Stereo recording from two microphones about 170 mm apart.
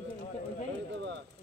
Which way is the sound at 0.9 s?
90° right.